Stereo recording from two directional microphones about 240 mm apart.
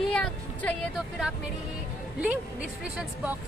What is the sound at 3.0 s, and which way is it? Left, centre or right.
Speech, centre.